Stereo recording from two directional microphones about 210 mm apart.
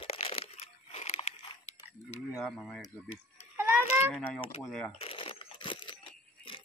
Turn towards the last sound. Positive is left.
turn(degrees=25)  # may be behind; listen again after turning